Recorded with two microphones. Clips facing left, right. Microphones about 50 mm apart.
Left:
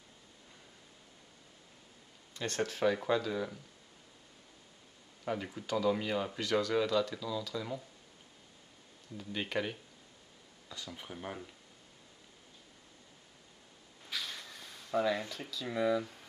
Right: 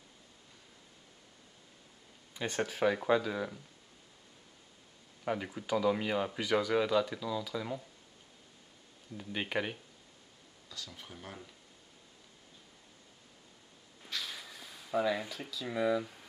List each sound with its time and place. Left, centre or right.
2.3 s speech: centre
5.2 s speech: centre
9.1 s speech: centre
10.7 s speech: centre
14.0 s a sound: centre